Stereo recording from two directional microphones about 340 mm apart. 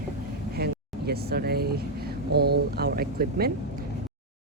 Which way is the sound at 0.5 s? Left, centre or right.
Right.